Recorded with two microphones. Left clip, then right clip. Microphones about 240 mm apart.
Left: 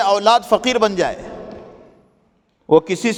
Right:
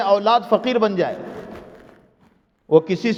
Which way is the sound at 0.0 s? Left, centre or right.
Left.